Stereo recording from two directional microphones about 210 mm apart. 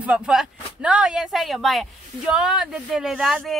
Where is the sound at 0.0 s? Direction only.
5° right (ahead or behind).